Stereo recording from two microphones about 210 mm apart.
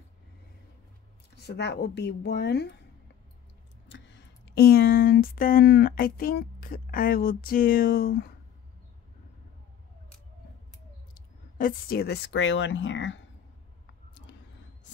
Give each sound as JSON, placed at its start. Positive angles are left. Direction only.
{"t": 1.4, "sound": "speech", "side_deg": 55}
{"t": 3.9, "sound": "speech", "side_deg": 60}
{"t": 11.1, "sound": "speech", "side_deg": 40}